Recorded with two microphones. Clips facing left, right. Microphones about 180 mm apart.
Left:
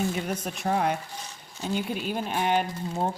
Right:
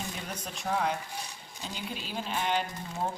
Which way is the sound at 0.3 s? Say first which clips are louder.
Left 6 dB; 60° left (ahead or behind).